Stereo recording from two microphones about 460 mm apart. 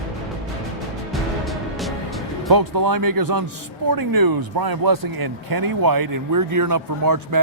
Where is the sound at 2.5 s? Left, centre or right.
Right.